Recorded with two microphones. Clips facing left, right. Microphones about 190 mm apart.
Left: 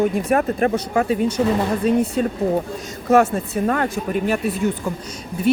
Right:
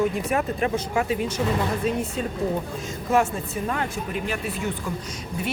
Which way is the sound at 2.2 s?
50° left (ahead or behind).